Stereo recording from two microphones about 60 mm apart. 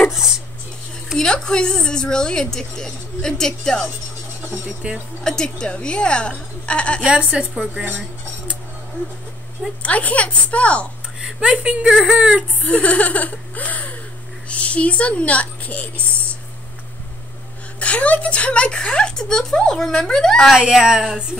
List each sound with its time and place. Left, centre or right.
0.1 s a sound: centre
1.1 s a woman's voice: centre
4.8 s speech: centre
5.2 s a woman's voice: centre
7.1 s speech: centre
9.8 s speech: left
11.1 s speech: centre
12.6 s speech: left
17.7 s a woman's voice: left
20.4 s speech: centre